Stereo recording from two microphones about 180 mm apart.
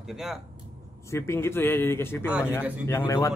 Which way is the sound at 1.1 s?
15° left (ahead or behind).